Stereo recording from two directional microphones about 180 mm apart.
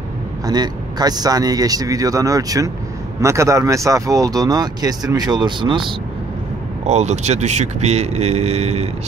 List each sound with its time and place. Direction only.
0.5 s speech: 20° right (ahead or behind)
6.9 s speech: 40° right (ahead or behind)